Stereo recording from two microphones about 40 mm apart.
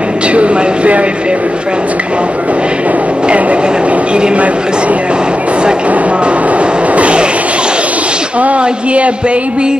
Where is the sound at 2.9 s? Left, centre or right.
Right.